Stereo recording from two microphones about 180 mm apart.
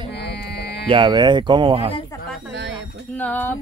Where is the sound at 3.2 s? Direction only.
10° left (ahead or behind).